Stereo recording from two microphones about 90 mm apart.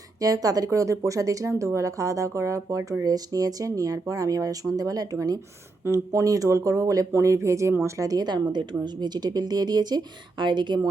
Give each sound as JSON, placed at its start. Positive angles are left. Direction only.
{"t": 0.2, "sound": "speech", "side_deg": -40}
{"t": 5.8, "sound": "speech", "side_deg": -30}